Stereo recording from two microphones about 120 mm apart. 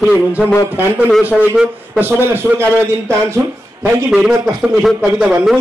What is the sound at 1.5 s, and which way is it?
Speech, 15° right (ahead or behind).